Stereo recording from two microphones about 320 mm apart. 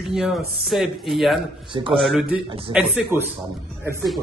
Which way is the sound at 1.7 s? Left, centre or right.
Centre.